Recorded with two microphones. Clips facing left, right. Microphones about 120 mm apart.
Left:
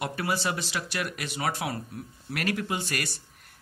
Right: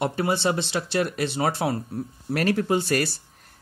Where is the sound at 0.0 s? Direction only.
25° right (ahead or behind).